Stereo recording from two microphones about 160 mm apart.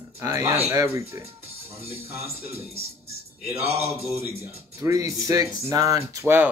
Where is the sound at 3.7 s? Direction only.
40° right (ahead or behind).